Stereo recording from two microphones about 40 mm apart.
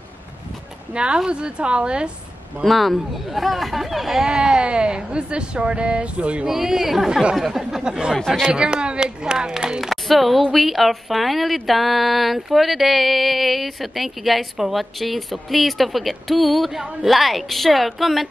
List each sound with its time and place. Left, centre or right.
0.9 s speech: right
2.6 s a woman's voice: centre
4.3 s speech: right
6.4 s speech: centre
7.8 s speech: centre
9.8 s a woman's voice: centre